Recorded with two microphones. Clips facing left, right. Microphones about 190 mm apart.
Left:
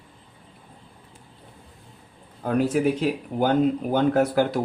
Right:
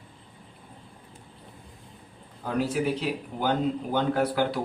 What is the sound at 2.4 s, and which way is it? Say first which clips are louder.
A man's voice: left 5 dB; 50° left (ahead or behind).